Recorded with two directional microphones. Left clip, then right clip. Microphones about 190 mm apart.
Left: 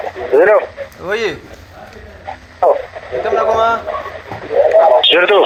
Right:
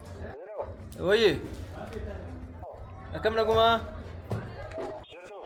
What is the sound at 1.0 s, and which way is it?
Speech, 25° right (ahead or behind).